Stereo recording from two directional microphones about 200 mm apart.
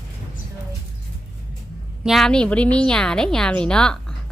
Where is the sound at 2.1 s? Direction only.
Centre (ahead or behind).